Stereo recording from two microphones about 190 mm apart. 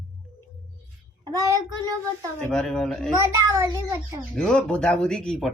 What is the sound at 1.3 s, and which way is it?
Speech, 20° right (ahead or behind).